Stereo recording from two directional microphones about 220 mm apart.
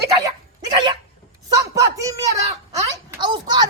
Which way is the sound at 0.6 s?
20° right (ahead or behind).